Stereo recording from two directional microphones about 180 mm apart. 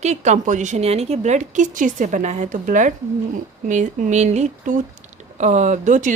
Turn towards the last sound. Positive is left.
turn(degrees=-45)  # may be behind; listen again after turning